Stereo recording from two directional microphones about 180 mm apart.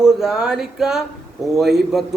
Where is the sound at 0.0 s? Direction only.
Centre (ahead or behind).